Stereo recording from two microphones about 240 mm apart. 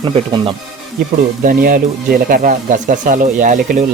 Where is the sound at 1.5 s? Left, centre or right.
Right.